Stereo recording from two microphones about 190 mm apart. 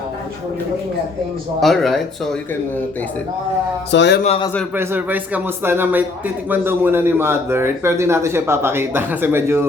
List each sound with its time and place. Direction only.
1.6 s speech: centre (ahead or behind)
3.9 s a man's voice: 65° left (ahead or behind)
4.2 s a man's voice: 30° left (ahead or behind)
4.7 s a man's voice: 10° right (ahead or behind)